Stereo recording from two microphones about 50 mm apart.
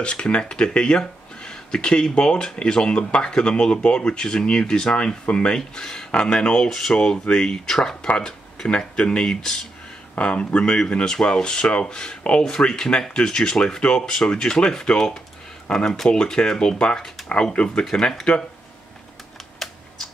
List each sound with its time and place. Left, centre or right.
0.0 s speech: left
17.8 s speech: centre